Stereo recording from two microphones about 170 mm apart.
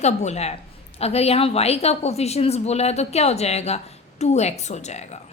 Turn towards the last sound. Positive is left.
turn(degrees=40)  # may be behind; listen again after turning